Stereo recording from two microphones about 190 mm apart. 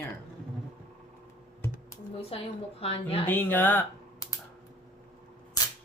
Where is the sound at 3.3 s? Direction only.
10° left (ahead or behind).